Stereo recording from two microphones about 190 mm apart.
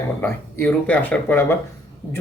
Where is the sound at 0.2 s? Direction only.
10° left (ahead or behind).